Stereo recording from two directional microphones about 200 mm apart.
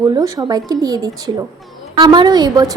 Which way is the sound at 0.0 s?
20° right (ahead or behind).